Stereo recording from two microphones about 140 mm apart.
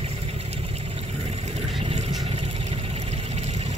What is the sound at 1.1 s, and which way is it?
Vehicle, 50° right (ahead or behind).